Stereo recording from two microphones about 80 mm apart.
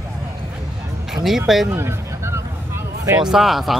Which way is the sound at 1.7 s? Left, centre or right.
Right.